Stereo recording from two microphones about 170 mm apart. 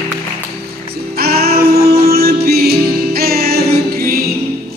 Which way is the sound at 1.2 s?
65° right (ahead or behind).